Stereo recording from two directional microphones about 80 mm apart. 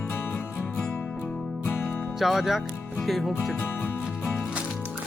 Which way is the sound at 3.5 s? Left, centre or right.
Left.